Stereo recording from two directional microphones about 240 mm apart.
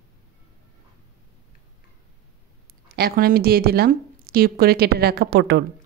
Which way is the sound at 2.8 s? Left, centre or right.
Right.